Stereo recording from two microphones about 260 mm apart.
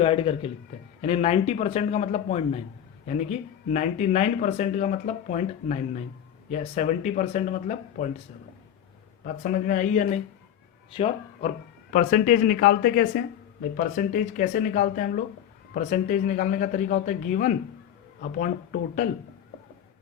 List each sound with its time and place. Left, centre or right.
0.0 s speech: left
9.2 s speech: left
11.3 s speech: left